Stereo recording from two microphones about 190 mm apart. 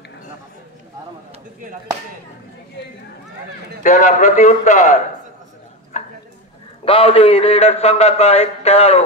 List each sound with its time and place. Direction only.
3.8 s a man's voice: 40° left (ahead or behind)
6.8 s a man's voice: 30° left (ahead or behind)